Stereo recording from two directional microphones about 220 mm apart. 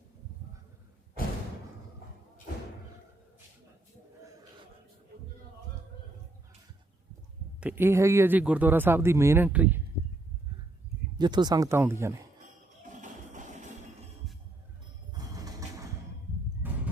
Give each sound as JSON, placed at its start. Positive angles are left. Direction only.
{"t": 7.6, "sound": "speech", "side_deg": -10}
{"t": 11.2, "sound": "speech", "side_deg": -20}
{"t": 12.8, "sound": "music", "side_deg": -35}